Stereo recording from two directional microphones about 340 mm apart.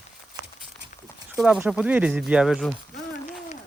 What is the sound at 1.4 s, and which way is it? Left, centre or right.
Speech, centre.